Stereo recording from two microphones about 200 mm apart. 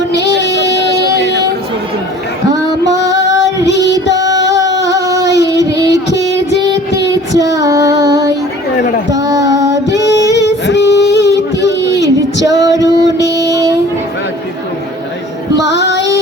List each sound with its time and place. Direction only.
1.1 s a sound: 60° right (ahead or behind)
2.5 s female singing: 20° right (ahead or behind)
3.1 s female singing: 60° left (ahead or behind)
4.1 s child singing: 15° right (ahead or behind)
9.1 s music: 20° right (ahead or behind)
10.7 s a sound: 60° left (ahead or behind)
11.9 s female singing: 15° right (ahead or behind)
13.2 s music: 15° right (ahead or behind)
15.6 s female singing: 60° left (ahead or behind)